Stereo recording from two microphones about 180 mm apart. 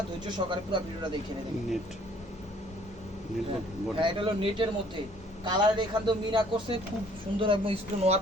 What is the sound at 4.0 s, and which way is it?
A man's voice, 25° right (ahead or behind).